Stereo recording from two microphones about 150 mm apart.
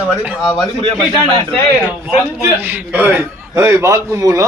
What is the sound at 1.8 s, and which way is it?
A man's voice, 10° right (ahead or behind).